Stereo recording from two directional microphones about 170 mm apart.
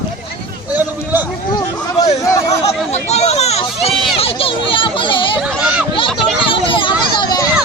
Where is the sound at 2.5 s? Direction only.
40° left (ahead or behind).